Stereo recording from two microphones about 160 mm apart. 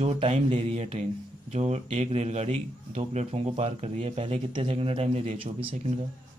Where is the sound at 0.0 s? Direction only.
45° right (ahead or behind).